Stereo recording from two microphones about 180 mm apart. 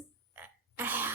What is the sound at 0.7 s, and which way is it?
Throat clearing, 10° right (ahead or behind).